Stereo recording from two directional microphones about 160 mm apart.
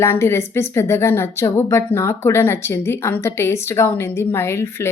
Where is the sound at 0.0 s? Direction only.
15° left (ahead or behind).